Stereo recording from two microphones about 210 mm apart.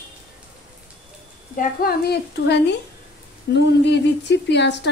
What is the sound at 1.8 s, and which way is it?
A woman's voice, 50° left (ahead or behind).